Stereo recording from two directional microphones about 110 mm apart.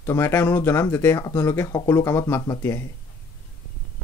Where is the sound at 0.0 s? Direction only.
20° left (ahead or behind).